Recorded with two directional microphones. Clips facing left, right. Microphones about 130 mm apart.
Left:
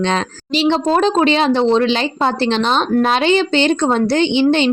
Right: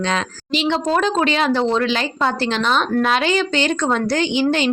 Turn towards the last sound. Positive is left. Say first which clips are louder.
# left 4 dB
turn(degrees=25)  # may be behind; listen again after turning